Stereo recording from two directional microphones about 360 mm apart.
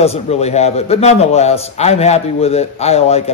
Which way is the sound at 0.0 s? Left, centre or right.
Centre.